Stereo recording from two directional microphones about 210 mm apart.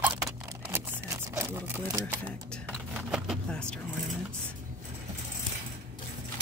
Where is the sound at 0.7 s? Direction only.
10° right (ahead or behind).